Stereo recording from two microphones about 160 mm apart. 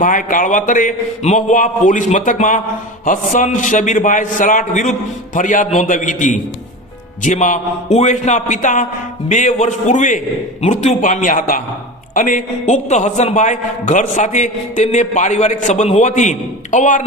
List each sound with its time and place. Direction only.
0.0 s a man's voice: 55° left (ahead or behind)